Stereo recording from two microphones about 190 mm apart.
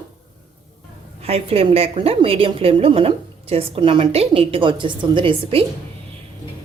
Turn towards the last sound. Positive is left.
turn(degrees=-30)  # may be behind; listen again after turning